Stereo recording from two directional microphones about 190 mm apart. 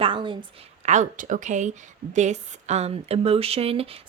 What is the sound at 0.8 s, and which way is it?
Speech, 40° right (ahead or behind).